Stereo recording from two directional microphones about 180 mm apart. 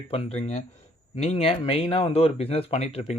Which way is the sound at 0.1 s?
35° left (ahead or behind).